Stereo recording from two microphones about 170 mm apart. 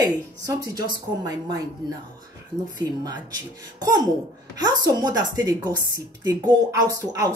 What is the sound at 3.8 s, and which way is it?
Speech, 20° right (ahead or behind).